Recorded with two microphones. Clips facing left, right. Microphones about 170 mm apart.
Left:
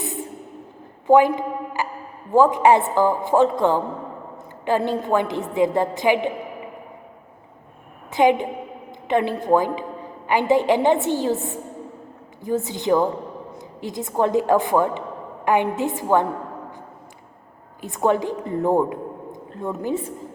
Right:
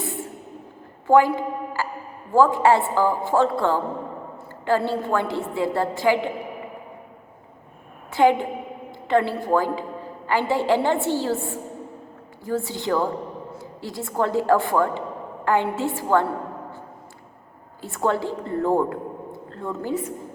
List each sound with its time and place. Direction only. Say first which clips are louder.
1.0 s a woman's voice: left 2 dB; 20° left (ahead or behind)
8.1 s a woman's voice: left 1 dB; 20° left (ahead or behind)
17.8 s a woman's voice: left 3 dB; 15° left (ahead or behind)